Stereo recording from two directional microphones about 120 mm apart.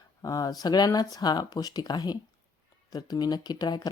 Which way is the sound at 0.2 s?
30° left (ahead or behind).